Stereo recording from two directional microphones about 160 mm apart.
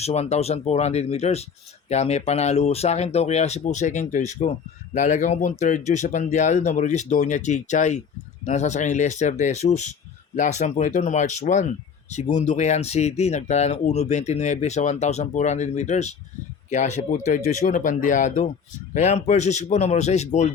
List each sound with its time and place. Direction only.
0.0 s speech: 45° left (ahead or behind)